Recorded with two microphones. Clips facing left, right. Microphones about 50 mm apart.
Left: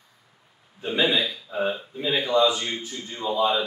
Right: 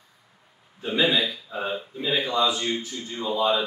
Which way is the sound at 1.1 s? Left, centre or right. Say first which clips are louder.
Left 1 dB; centre.